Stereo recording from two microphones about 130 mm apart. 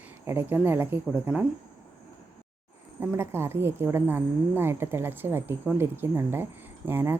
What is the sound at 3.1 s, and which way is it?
A woman's voice, 20° right (ahead or behind).